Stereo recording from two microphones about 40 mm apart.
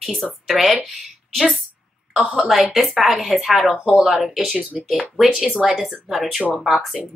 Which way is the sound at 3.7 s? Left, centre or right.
Right.